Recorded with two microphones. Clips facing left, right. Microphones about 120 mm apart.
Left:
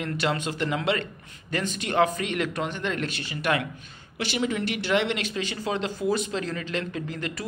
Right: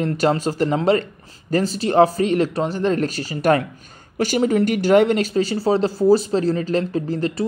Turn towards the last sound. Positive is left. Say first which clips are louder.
# right 10 dB
turn(degrees=-35)  # may be behind; listen again after turning